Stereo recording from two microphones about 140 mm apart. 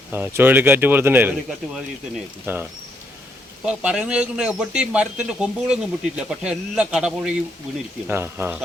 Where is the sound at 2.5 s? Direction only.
15° right (ahead or behind).